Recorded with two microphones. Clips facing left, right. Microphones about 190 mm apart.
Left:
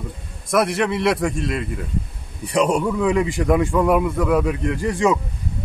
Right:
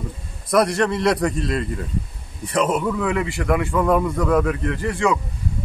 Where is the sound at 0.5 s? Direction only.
5° left (ahead or behind).